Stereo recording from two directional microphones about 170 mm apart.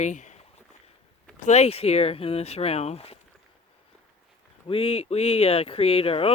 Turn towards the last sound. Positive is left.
turn(degrees=35)  # may be behind; listen again after turning